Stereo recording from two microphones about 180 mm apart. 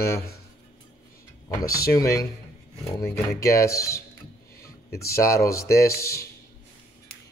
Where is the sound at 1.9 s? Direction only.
20° left (ahead or behind).